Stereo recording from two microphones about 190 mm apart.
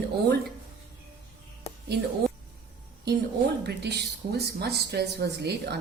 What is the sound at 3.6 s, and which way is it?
Speech, 60° right (ahead or behind).